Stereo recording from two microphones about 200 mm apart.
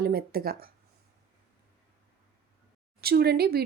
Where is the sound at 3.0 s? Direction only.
50° right (ahead or behind).